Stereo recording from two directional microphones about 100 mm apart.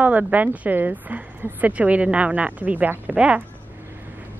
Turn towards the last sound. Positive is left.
turn(degrees=-10)  # may be behind; listen again after turning